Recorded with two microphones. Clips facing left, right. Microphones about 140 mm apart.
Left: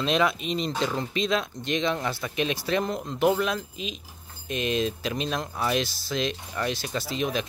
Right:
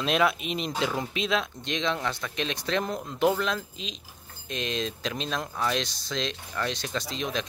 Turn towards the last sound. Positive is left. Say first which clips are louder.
# left 3 dB
turn(degrees=5)  # may be behind; listen again after turning